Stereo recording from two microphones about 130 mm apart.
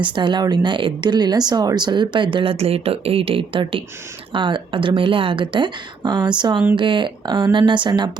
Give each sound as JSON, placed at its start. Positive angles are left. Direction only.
{"t": 0.0, "sound": "a woman's voice", "side_deg": -35}